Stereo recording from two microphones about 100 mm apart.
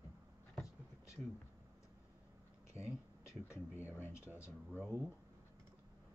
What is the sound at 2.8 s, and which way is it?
Speech, 25° left (ahead or behind).